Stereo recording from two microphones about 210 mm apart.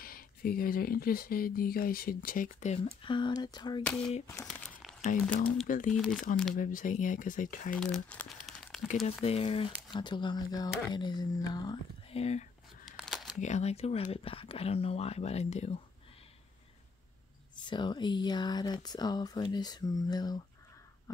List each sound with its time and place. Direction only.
0.0 s speech: 45° left (ahead or behind)
3.0 s speech: 20° left (ahead or behind)
3.8 s speech: 5° left (ahead or behind)
5.0 s speech: 40° left (ahead or behind)
5.9 s speech: centre (ahead or behind)
6.5 s speech: 40° left (ahead or behind)
7.7 s speech: 5° left (ahead or behind)
9.2 s speech: 30° left (ahead or behind)
12.9 s a sound: centre (ahead or behind)
13.4 s speech: 30° left (ahead or behind)
17.6 s speech: 20° left (ahead or behind)